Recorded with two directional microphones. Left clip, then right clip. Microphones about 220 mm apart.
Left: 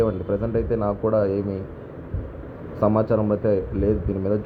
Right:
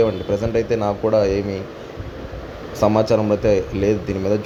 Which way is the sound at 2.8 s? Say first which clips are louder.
Right 4 dB; 15° right (ahead or behind).